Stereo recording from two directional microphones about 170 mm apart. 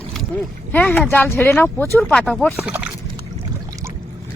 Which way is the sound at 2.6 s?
5° right (ahead or behind).